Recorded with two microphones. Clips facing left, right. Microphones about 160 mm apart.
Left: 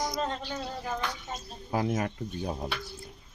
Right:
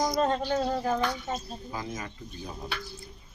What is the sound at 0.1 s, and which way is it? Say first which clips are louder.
Speech: right 7 dB; 45° right (ahead or behind).